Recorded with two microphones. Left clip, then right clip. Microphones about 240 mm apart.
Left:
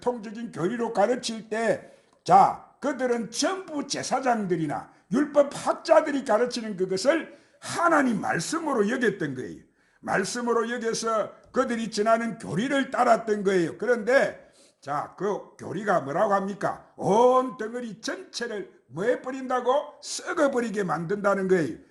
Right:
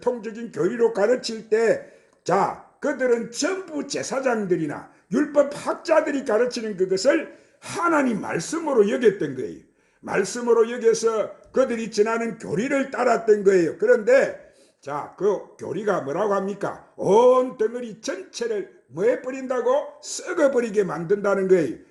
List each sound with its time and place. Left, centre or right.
0.0 s a man's voice: left
15.5 s a man's voice: left